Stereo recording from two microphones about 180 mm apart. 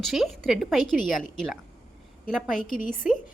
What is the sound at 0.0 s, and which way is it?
A woman's voice, centre (ahead or behind).